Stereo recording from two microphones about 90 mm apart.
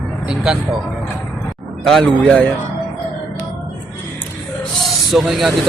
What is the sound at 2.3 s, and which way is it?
Speech, 10° left (ahead or behind).